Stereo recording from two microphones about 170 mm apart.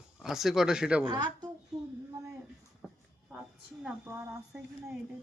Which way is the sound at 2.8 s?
10° left (ahead or behind).